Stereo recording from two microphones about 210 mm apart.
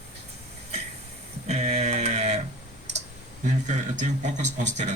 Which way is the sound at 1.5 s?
30° right (ahead or behind).